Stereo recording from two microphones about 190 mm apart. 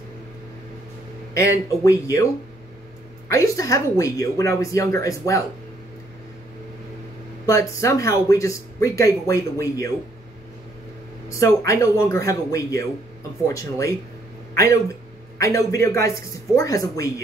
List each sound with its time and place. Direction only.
1.3 s speech: 15° left (ahead or behind)
3.3 s speech: 15° left (ahead or behind)
7.4 s speech: 15° left (ahead or behind)
11.2 s speech: 15° left (ahead or behind)
15.4 s speech: 15° left (ahead or behind)